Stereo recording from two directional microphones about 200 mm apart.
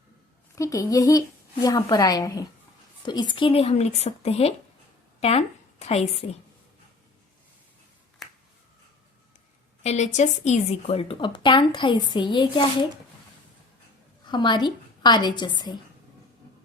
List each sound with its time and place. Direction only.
0.5 s a woman's voice: 15° left (ahead or behind)
9.8 s a woman's voice: 35° left (ahead or behind)
14.3 s a woman's voice: 20° left (ahead or behind)